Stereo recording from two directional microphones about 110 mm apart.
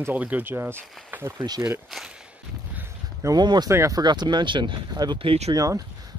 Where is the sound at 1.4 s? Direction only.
40° right (ahead or behind).